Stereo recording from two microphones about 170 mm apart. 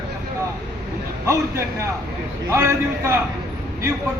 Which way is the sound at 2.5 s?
15° right (ahead or behind).